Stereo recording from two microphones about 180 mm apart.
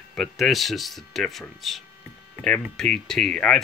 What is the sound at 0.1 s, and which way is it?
Speech, centre (ahead or behind).